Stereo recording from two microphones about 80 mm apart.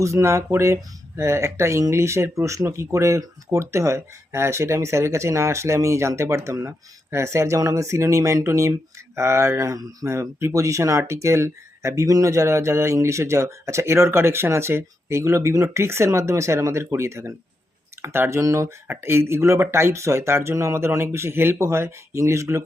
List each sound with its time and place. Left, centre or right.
0.0 s speech: right